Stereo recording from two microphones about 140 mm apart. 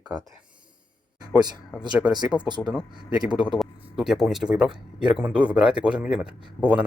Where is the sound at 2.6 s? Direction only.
Centre (ahead or behind).